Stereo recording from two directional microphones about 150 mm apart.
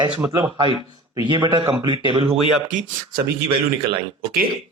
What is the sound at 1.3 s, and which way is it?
A man's voice, 30° right (ahead or behind).